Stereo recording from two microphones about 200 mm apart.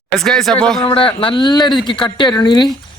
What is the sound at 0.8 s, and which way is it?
Speech, 25° left (ahead or behind).